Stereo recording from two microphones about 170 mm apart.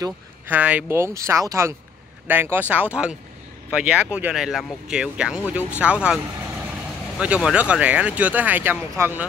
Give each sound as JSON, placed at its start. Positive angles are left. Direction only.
{"t": 0.5, "sound": "speech", "side_deg": -10}
{"t": 7.2, "sound": "speech", "side_deg": -5}